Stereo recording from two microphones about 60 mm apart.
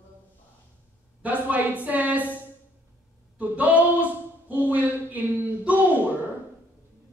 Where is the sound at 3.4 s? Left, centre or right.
Right.